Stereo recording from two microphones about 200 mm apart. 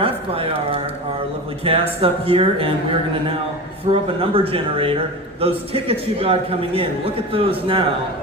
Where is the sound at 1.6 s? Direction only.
30° right (ahead or behind).